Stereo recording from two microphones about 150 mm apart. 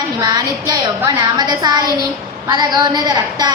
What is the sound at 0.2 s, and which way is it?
A woman's voice, 25° right (ahead or behind).